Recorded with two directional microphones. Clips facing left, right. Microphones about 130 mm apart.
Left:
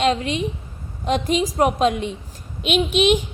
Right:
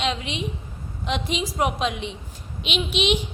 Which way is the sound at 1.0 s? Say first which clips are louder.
Left 6 dB; 45° left (ahead or behind).